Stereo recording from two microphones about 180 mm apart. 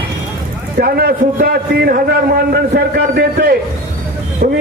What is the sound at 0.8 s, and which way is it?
A man's voice, 55° right (ahead or behind).